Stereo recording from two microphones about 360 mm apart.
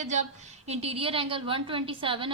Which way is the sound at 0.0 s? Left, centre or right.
Centre.